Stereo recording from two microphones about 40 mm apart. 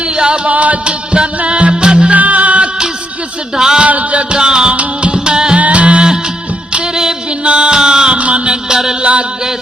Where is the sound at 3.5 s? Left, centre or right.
Centre.